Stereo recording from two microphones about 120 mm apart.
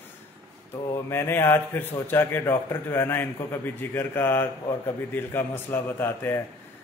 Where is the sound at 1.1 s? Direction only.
20° left (ahead or behind).